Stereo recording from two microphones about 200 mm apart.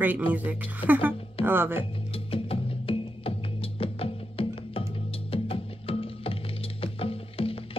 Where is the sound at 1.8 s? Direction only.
30° left (ahead or behind).